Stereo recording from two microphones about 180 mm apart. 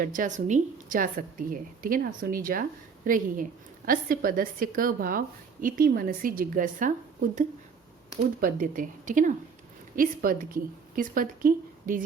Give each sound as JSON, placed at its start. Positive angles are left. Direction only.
{"t": 0.0, "sound": "a woman's voice", "side_deg": -45}